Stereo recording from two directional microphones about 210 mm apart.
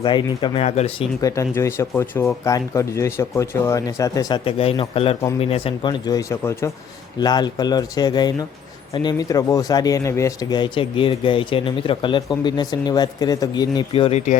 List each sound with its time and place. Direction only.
0.0 s speech: 20° left (ahead or behind)
1.2 s speech: 15° left (ahead or behind); by 14.3 s 30° left (ahead or behind)